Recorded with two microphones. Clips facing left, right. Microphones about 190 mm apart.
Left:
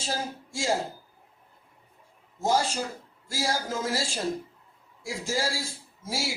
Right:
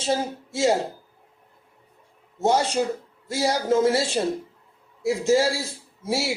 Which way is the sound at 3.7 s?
65° right (ahead or behind).